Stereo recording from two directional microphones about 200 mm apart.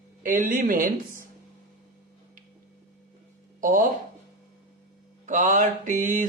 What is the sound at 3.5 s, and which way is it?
Speech, 40° right (ahead or behind).